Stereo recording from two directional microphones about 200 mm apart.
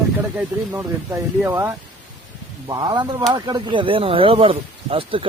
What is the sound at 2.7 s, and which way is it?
Speech, 25° right (ahead or behind).